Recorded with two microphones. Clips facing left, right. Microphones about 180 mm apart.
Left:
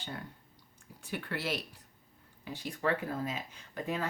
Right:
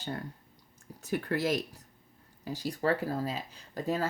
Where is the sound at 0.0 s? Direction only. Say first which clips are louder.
Right 5 dB; 40° right (ahead or behind).